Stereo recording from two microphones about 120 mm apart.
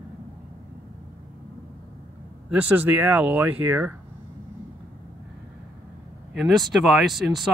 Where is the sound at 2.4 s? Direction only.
15° right (ahead or behind).